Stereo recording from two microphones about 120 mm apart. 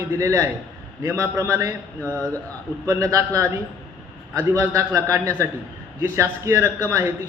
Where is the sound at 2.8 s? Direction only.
25° right (ahead or behind).